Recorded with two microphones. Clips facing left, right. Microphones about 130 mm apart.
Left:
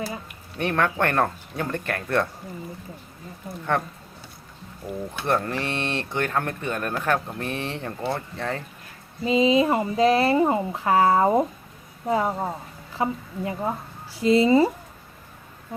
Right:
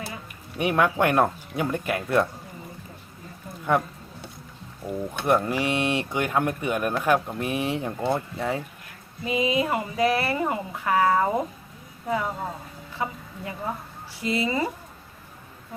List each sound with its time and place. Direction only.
0.5 s speech: 10° right (ahead or behind)
3.7 s speech: 10° right (ahead or behind)
5.2 s speech: 10° right (ahead or behind)
9.2 s speech: 25° left (ahead or behind)